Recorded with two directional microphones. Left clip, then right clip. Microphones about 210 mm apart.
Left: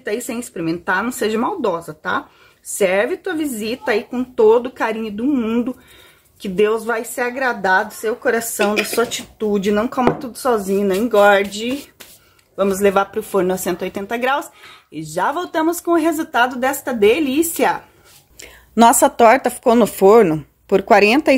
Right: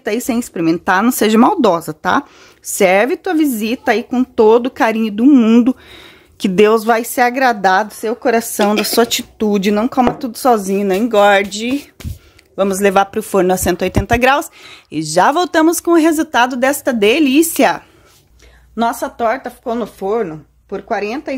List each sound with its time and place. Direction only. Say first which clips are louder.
0.0 s speech: right 5 dB; 50° right (ahead or behind)
18.8 s speech: left 6 dB; 35° left (ahead or behind)